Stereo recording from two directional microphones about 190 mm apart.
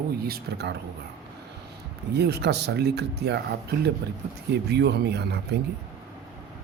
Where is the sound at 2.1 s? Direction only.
60° right (ahead or behind).